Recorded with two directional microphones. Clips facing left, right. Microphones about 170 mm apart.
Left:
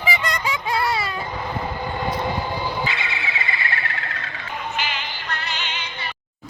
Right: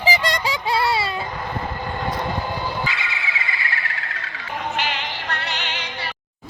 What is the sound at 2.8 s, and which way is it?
Music, 25° left (ahead or behind).